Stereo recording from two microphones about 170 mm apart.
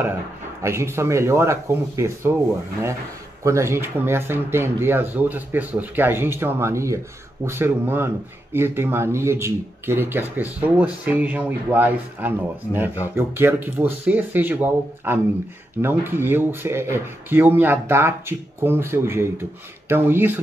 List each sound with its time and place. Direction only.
0.6 s speech: 15° right (ahead or behind)
3.4 s speech: 15° right (ahead or behind)